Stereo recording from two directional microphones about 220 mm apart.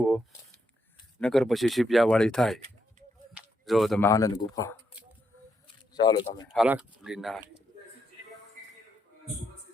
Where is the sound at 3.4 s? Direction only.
Centre (ahead or behind).